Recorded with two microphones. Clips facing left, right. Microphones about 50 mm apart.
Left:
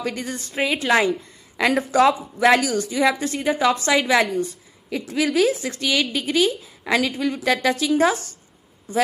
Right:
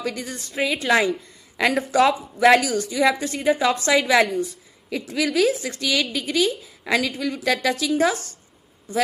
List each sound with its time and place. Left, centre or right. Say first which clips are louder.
0.0 s a woman's voice: left 1 dB; left
0.3 s a woman's voice: left 1 dB; centre